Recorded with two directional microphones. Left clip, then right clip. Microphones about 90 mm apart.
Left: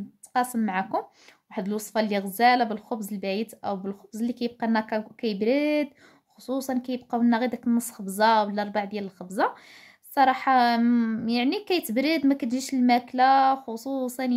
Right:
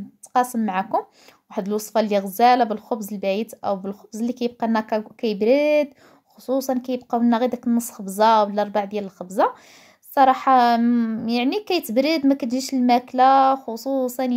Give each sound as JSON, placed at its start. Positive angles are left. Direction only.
{"t": 0.3, "sound": "speech", "side_deg": -30}
{"t": 10.8, "sound": "a woman's voice", "side_deg": -10}
{"t": 11.2, "sound": "speech", "side_deg": -25}